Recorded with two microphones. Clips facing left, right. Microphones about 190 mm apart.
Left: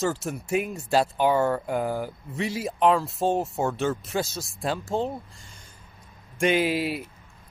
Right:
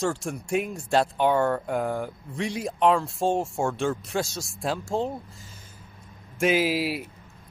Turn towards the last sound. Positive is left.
turn(degrees=0)  # may be behind; listen again after turning